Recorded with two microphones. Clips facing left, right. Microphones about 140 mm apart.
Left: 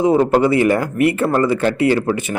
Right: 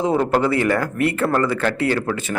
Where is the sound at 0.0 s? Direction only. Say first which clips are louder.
Left 5 dB; 10° left (ahead or behind).